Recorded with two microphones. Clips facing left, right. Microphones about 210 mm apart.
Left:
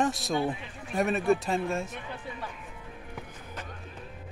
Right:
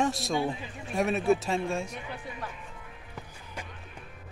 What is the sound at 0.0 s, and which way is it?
A man's voice, centre (ahead or behind).